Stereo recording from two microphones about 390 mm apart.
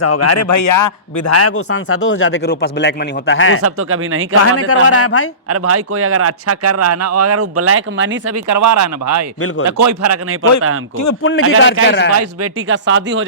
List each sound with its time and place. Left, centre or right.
0.0 s a man's voice: left
1.3 s speech: left
3.6 s speech: right
4.4 s speech: left
5.5 s speech: right
8.4 s speech: right
11.2 s speech: left
12.1 s speech: right